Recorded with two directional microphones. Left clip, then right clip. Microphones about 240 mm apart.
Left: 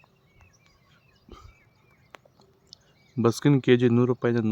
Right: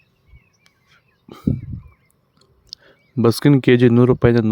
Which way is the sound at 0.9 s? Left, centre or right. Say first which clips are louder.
Right 9 dB; right.